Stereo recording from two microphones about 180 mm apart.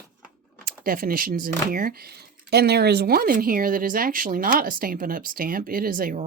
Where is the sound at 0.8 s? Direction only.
50° right (ahead or behind).